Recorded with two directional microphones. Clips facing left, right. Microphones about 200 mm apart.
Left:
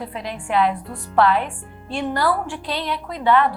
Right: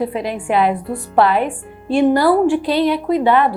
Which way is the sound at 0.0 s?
10° right (ahead or behind).